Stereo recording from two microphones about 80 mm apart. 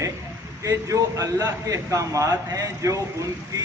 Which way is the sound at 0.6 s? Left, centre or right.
Right.